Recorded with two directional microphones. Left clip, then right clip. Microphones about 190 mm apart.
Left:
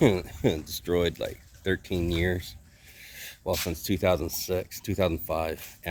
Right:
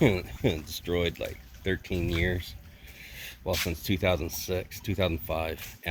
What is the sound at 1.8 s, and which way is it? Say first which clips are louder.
Speech: left 2 dB; 15° left (ahead or behind).